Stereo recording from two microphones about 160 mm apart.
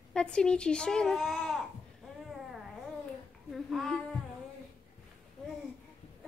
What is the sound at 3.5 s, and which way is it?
Babbling, centre (ahead or behind).